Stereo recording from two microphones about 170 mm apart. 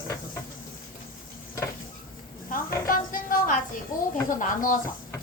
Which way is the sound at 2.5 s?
55° left (ahead or behind).